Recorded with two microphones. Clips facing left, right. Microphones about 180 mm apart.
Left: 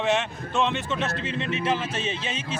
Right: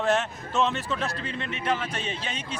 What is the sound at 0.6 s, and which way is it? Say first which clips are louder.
A man's voice: left 1 dB; 15° left (ahead or behind).